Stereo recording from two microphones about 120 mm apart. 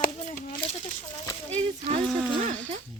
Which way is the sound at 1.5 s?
65° right (ahead or behind).